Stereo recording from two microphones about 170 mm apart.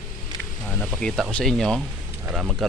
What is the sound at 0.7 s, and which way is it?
Speech, 5° left (ahead or behind).